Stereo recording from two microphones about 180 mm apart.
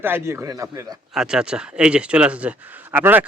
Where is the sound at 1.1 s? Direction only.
5° right (ahead or behind).